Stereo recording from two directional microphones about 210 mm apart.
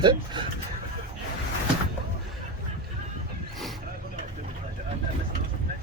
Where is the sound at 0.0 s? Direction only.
20° right (ahead or behind).